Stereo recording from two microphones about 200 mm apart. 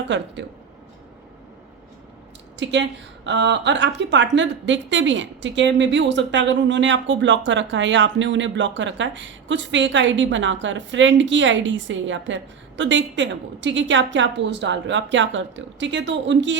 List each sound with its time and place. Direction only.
2.6 s speech: 65° right (ahead or behind)